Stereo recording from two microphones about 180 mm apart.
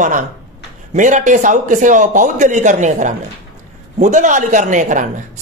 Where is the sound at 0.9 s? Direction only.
45° right (ahead or behind).